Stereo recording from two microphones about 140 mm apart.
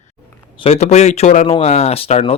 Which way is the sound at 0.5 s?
40° left (ahead or behind).